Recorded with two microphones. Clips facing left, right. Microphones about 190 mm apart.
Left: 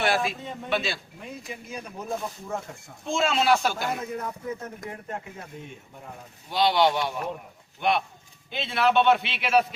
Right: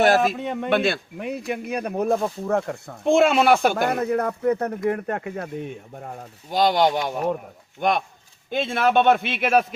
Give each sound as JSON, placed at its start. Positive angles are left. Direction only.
{"t": 0.0, "sound": "a man's voice", "side_deg": -45}
{"t": 0.3, "sound": "speech", "side_deg": -70}
{"t": 6.5, "sound": "a man's voice", "side_deg": -45}